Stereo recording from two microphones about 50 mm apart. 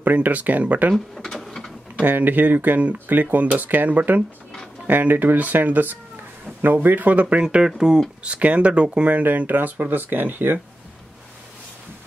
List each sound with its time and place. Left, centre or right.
0.0 s speech: right
0.9 s drawer open or close: centre
2.1 s speech: right
7.4 s speech: centre
8.2 s speech: right
9.1 s speech: right